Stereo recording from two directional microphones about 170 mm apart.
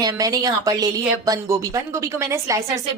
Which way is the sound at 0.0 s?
20° right (ahead or behind).